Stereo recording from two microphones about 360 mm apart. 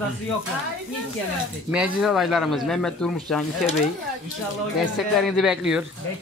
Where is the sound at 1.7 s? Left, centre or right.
Centre.